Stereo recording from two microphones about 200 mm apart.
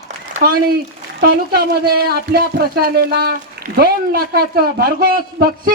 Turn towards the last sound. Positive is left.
turn(degrees=-45)  # may be behind; listen again after turning